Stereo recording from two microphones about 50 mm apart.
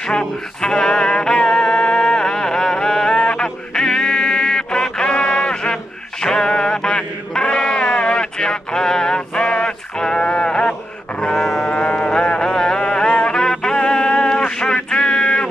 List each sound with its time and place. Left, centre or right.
0.1 s music: centre
6.2 s chant: centre
11.1 s livestock: left
11.4 s music: centre
11.7 s music: left